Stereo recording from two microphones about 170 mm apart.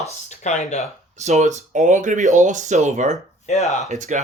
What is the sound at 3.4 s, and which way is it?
Speech, 40° left (ahead or behind).